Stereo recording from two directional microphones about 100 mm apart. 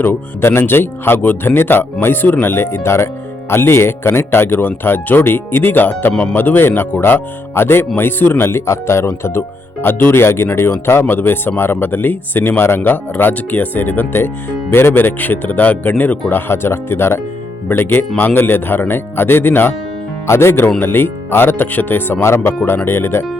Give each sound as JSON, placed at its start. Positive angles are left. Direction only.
{"t": 0.0, "sound": "speech", "side_deg": 25}